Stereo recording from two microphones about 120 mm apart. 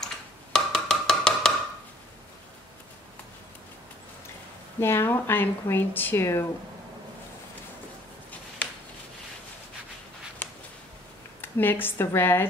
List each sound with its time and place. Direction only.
0.0 s a sound: 5° left (ahead or behind)
4.7 s speech: 20° left (ahead or behind)
11.4 s a woman's voice: 15° left (ahead or behind)